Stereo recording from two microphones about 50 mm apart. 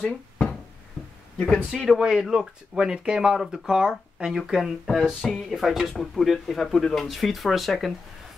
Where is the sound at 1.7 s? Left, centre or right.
Centre.